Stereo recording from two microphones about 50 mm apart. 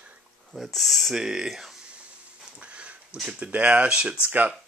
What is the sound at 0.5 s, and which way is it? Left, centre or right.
Speech, centre.